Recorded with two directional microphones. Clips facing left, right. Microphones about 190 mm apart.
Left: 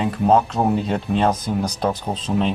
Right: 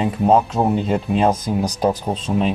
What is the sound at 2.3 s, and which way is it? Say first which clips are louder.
Speech: right 1 dB; 5° right (ahead or behind).